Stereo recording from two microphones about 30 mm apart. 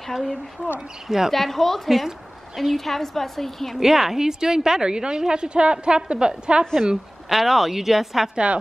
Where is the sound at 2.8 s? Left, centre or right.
Centre.